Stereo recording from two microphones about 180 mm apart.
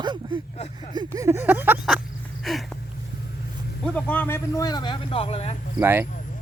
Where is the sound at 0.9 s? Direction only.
20° right (ahead or behind); by 2.6 s centre (ahead or behind).